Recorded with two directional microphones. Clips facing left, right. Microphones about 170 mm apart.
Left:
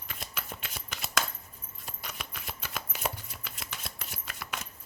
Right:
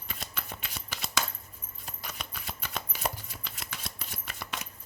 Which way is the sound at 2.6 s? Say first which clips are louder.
Right 1 dB; 5° left (ahead or behind).